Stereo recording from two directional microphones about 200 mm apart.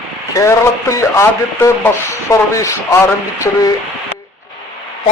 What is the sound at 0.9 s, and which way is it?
Speech, 15° left (ahead or behind).